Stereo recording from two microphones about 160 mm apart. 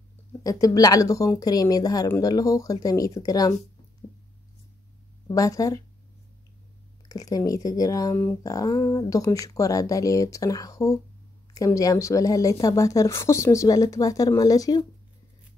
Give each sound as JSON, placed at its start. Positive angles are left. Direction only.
{"t": 0.4, "sound": "speech", "side_deg": 20}
{"t": 5.3, "sound": "speech", "side_deg": 20}
{"t": 7.1, "sound": "speech", "side_deg": 20}